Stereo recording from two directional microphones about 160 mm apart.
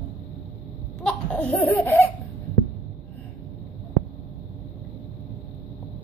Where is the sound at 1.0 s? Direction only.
5° left (ahead or behind).